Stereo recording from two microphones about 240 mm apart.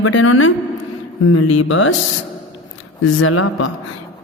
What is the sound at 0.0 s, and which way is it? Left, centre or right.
A woman's voice, left.